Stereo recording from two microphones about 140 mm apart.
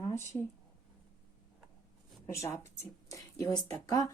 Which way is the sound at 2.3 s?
20° left (ahead or behind).